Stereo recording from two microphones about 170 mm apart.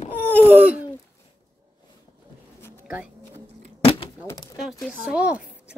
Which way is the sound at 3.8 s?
30° left (ahead or behind).